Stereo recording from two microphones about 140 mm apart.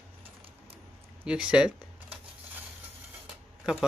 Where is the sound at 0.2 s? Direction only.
40° right (ahead or behind).